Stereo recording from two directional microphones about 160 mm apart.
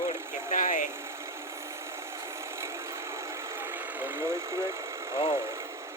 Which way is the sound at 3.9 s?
15° right (ahead or behind).